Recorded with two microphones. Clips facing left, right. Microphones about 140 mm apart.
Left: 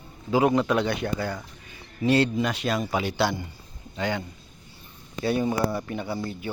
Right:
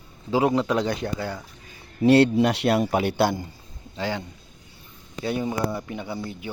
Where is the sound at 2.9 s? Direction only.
55° right (ahead or behind).